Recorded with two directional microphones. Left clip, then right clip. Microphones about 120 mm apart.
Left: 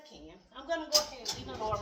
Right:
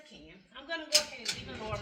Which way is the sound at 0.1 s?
35° left (ahead or behind).